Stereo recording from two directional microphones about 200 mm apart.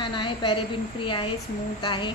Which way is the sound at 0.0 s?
25° left (ahead or behind).